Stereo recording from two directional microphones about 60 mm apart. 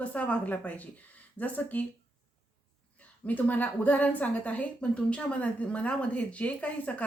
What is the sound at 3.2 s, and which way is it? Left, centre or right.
A woman's voice, left.